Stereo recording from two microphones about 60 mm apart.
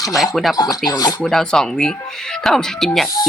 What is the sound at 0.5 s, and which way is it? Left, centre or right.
Speech, left.